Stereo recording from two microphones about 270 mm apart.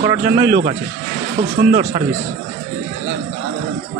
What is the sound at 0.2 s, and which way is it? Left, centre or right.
Speech, right.